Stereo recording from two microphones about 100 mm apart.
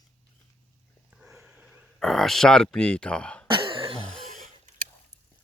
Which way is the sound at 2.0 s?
5° left (ahead or behind).